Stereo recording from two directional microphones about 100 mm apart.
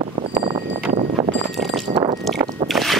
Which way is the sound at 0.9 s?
90° right.